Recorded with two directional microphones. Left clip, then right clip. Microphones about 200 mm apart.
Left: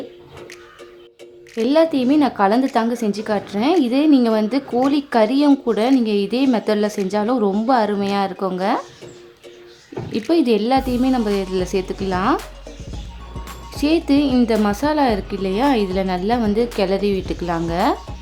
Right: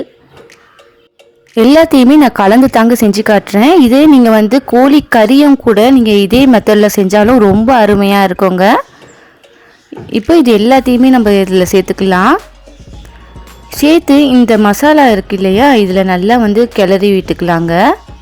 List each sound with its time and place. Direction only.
1.5 s a woman's voice: 50° right (ahead or behind)
10.1 s a woman's voice: 40° right (ahead or behind)
13.7 s music: 40° right (ahead or behind)
14.2 s a woman's voice: 35° right (ahead or behind)